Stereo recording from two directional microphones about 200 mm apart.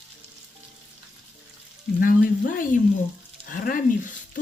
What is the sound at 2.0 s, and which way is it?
Speech, 45° left (ahead or behind).